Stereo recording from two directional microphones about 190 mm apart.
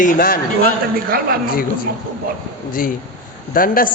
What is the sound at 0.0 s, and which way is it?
Speech, 45° left (ahead or behind).